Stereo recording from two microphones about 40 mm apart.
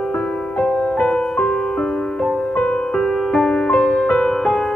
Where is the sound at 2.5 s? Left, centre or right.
Left.